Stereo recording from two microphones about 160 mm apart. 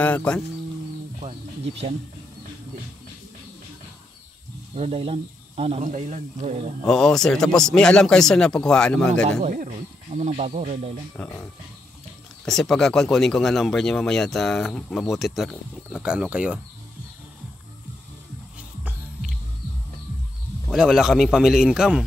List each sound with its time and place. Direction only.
0.0 s speech: 10° left (ahead or behind)
1.2 s speech: 40° right (ahead or behind)
4.7 s speech: 40° right (ahead or behind)
6.9 s speech: 5° left (ahead or behind)
9.4 s speech: 50° right (ahead or behind)
11.2 s speech: 5° left (ahead or behind)
12.4 s speech: 5° left (ahead or behind)
20.7 s speech: 5° right (ahead or behind)